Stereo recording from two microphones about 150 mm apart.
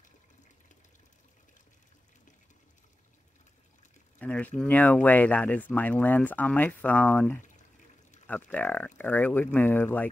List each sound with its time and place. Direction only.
4.2 s speech: 10° left (ahead or behind)